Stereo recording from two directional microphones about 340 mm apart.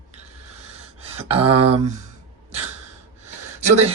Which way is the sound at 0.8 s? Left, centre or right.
Centre.